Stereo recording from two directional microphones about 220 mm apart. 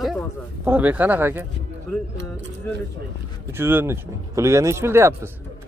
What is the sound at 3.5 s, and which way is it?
Speech, 10° right (ahead or behind).